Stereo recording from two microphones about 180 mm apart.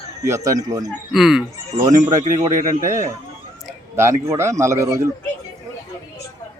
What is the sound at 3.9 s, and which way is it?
Speech, 15° right (ahead or behind).